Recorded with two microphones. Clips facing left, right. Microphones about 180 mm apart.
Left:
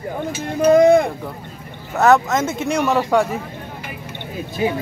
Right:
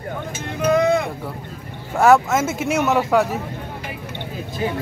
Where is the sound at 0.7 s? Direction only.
45° left (ahead or behind).